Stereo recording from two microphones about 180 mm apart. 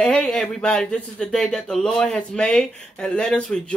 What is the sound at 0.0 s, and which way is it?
Speech, 5° left (ahead or behind).